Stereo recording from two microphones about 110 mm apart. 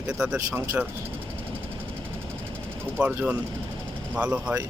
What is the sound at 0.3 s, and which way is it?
Speech, 20° right (ahead or behind).